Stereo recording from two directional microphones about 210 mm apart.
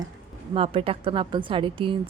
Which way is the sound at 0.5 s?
25° right (ahead or behind).